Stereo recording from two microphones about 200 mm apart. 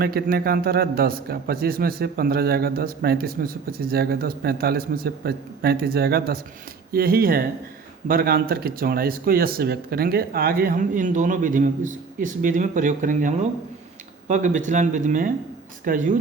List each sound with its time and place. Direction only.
0.0 s a man's voice: 50° right (ahead or behind)